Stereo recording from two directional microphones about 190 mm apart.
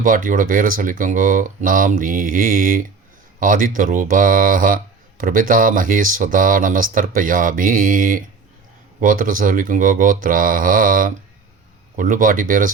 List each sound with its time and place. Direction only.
0.0 s speech: 45° right (ahead or behind)